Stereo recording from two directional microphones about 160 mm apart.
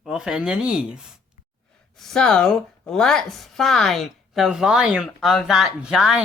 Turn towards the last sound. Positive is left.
turn(degrees=-5)  # may be behind; listen again after turning